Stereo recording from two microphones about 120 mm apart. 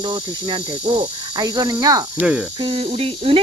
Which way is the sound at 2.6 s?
50° right (ahead or behind).